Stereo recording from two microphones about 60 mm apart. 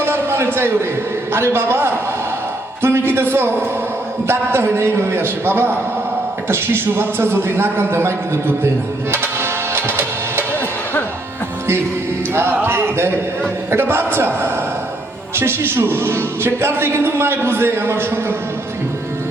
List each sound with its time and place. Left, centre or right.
0.0 s a man's voice: right
9.1 s music: right
12.3 s a man's voice: right